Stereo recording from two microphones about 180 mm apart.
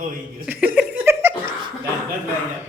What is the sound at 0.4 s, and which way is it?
Laughter, 5° right (ahead or behind).